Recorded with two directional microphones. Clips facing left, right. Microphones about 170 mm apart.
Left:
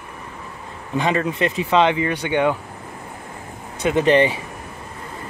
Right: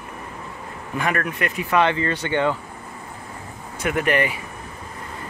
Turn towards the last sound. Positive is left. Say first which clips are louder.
# left 5 dB
turn(degrees=25)  # may be behind; listen again after turning